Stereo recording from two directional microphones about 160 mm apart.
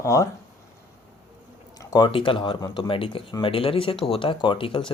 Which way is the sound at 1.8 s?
25° left (ahead or behind).